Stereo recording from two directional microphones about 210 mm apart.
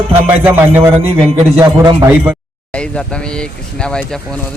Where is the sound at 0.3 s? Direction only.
10° right (ahead or behind).